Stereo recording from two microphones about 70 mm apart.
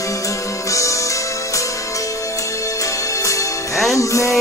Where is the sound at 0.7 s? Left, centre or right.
Left.